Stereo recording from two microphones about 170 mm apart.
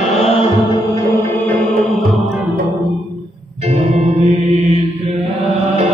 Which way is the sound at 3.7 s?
40° right (ahead or behind).